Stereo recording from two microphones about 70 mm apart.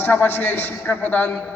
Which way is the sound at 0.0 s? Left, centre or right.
Left.